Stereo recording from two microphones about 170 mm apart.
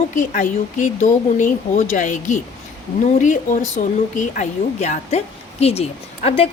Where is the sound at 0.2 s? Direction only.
50° left (ahead or behind).